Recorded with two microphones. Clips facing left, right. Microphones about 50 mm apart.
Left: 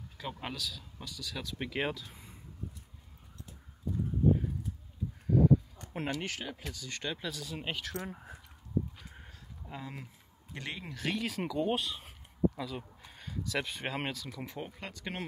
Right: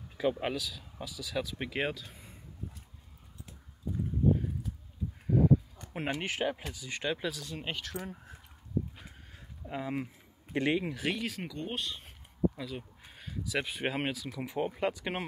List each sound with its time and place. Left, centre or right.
0.2 s speech: centre
5.3 s a sound: centre
6.7 s speech: centre
7.3 s speech: centre
9.7 s speech: right
14.6 s speech: centre